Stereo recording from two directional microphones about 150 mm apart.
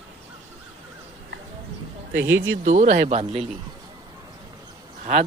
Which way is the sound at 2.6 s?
55° right (ahead or behind).